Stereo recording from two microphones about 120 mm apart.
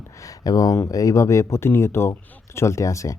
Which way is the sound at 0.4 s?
30° left (ahead or behind).